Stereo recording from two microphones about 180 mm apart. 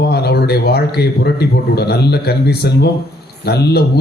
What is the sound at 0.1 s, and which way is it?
A man's voice, 65° left (ahead or behind).